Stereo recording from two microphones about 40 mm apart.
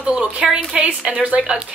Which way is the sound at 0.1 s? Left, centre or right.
Centre.